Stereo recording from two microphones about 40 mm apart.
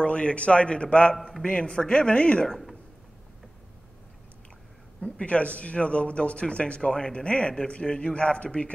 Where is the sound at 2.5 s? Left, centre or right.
Centre.